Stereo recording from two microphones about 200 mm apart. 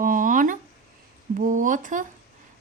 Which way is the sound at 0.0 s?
40° right (ahead or behind).